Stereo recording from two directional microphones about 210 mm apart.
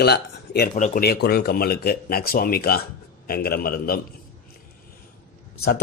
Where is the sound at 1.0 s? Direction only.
50° left (ahead or behind).